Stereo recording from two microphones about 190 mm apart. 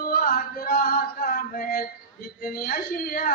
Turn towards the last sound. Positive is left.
turn(degrees=50)  # may be behind; listen again after turning